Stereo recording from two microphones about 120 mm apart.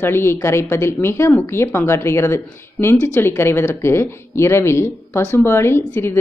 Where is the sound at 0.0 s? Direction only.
20° left (ahead or behind).